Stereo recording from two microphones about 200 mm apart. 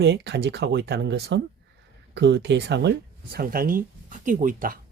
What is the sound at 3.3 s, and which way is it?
Speech, 45° right (ahead or behind).